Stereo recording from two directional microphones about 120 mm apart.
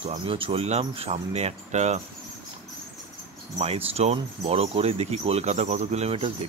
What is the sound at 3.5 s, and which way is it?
Speech, 55° right (ahead or behind).